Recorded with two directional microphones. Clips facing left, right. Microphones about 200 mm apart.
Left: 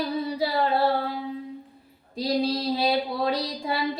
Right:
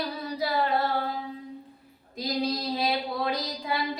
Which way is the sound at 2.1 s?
30° left (ahead or behind).